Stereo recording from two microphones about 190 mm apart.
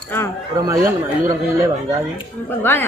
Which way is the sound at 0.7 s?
15° right (ahead or behind).